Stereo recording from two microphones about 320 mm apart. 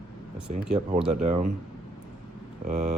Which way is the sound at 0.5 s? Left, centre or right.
Centre.